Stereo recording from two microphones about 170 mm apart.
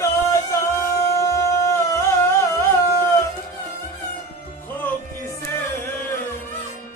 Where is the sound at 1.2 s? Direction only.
20° left (ahead or behind).